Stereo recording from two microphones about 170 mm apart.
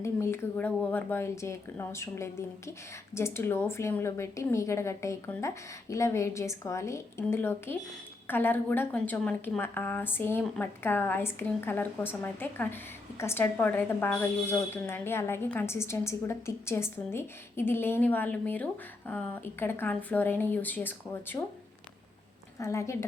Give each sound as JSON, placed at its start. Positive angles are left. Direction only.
{"t": 0.0, "sound": "a woman's voice", "side_deg": 15}
{"t": 22.5, "sound": "a woman's voice", "side_deg": 15}